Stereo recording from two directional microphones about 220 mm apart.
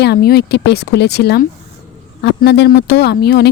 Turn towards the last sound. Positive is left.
turn(degrees=50)  # may be behind; listen again after turning